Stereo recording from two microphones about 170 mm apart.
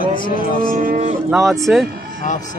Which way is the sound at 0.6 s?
55° right (ahead or behind).